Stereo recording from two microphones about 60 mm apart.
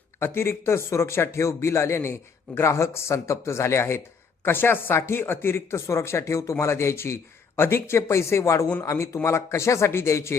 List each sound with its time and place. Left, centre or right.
0.2 s speech: left